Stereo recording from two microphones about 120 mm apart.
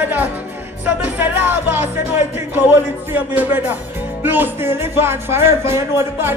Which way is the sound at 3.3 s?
15° right (ahead or behind).